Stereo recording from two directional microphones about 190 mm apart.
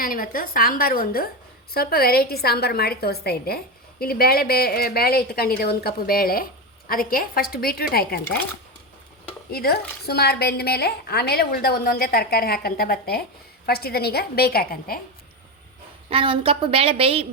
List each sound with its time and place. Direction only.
0.0 s a woman's voice: 50° left (ahead or behind)
9.5 s a woman's voice: 55° left (ahead or behind)
16.0 s a woman's voice: 30° right (ahead or behind)